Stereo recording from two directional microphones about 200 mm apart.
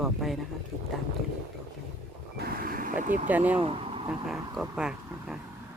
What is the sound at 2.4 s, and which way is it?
Vehicle, 45° right (ahead or behind).